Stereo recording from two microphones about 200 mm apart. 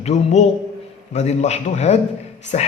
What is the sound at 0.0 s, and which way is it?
A man's voice, 35° left (ahead or behind).